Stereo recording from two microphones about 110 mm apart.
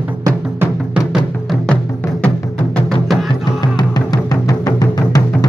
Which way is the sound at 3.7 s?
40° left (ahead or behind).